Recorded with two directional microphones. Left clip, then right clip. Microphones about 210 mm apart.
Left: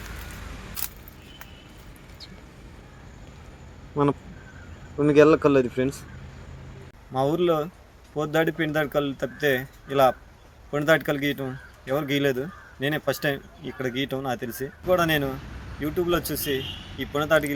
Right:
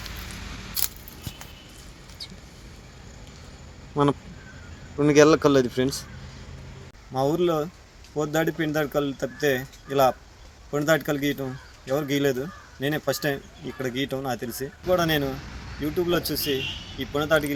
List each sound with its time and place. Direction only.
4.9 s speech: 20° right (ahead or behind)
7.1 s speech: centre (ahead or behind)